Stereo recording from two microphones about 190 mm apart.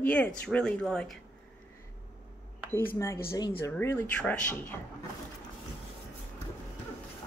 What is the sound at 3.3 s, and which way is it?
Speech, 20° left (ahead or behind).